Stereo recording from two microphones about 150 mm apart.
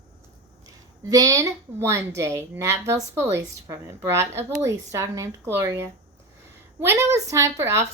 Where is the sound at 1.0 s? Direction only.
25° right (ahead or behind).